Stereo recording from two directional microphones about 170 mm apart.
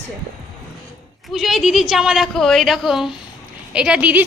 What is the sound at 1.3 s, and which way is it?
A woman's voice, centre (ahead or behind).